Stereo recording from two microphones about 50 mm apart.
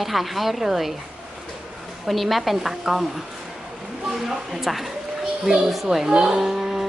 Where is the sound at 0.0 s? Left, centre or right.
Centre.